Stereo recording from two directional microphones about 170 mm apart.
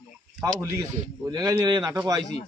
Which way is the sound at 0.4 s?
20° right (ahead or behind).